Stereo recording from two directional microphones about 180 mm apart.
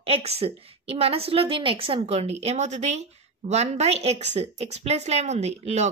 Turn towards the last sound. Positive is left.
turn(degrees=-40)  # may be behind; listen again after turning